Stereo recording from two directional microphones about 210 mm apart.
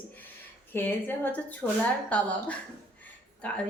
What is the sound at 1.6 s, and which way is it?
Speech, 5° right (ahead or behind).